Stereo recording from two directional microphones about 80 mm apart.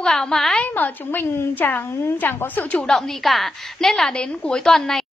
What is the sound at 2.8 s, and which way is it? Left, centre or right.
A woman's voice, centre.